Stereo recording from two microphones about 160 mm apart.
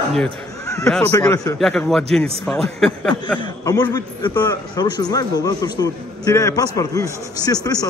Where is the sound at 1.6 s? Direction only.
5° left (ahead or behind).